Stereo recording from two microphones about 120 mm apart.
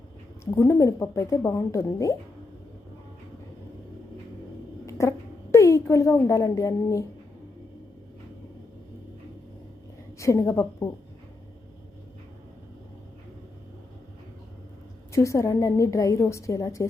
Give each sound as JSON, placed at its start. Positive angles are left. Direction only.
{"t": 0.5, "sound": "a woman's voice", "side_deg": 20}
{"t": 4.9, "sound": "a sound", "side_deg": 25}
{"t": 10.2, "sound": "a woman's voice", "side_deg": 25}
{"t": 15.1, "sound": "a woman's voice", "side_deg": 25}